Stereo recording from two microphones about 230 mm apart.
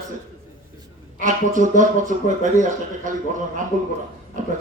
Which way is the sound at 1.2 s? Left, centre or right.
Right.